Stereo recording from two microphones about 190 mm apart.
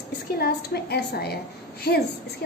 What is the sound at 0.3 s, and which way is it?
A woman's voice, 55° left (ahead or behind).